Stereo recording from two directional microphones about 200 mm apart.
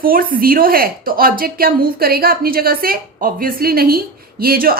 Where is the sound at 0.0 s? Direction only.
45° right (ahead or behind).